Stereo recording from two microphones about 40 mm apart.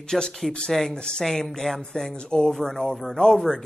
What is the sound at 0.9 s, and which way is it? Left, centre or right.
Speech, left.